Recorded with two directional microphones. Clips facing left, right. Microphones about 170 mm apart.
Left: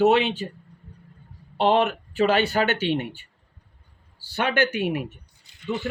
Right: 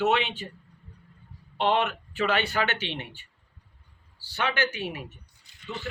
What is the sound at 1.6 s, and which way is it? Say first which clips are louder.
Speech: left 5 dB; 40° left (ahead or behind).